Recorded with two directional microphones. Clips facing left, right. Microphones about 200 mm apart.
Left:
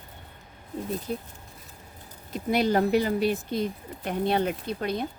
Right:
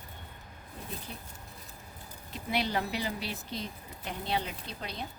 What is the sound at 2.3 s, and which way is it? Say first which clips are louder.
Speech: left 9 dB; 45° left (ahead or behind).